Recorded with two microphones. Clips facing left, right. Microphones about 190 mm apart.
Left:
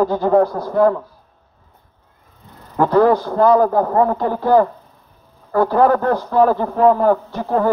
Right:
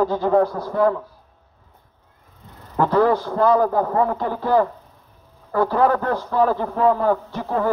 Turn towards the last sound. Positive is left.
turn(degrees=45)  # may be behind; listen again after turning